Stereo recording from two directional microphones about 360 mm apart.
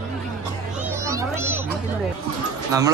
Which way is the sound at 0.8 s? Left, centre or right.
Centre.